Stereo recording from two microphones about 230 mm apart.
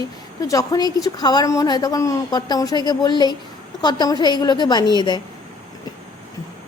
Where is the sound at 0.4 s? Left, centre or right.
Centre.